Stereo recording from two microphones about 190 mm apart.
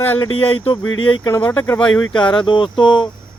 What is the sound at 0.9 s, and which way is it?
Speech, 90° left.